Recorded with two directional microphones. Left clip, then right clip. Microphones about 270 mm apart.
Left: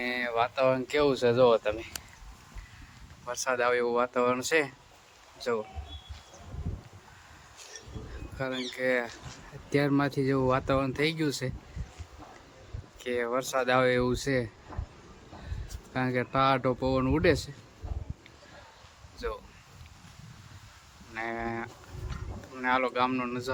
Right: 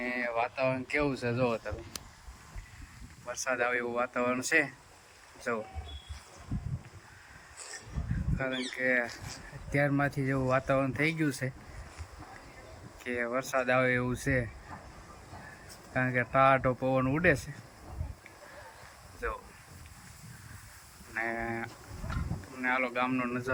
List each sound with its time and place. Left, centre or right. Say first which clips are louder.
0.0 s speech: left 3 dB; centre
3.2 s speech: left 3 dB; centre
8.4 s speech: left 1 dB; centre
9.0 s speech: right 1 dB; right
9.6 s speech: left 2 dB; centre
13.0 s speech: left 3 dB; centre
15.9 s speech: even; centre
19.2 s speech: left 1 dB; centre
21.2 s speech: even; centre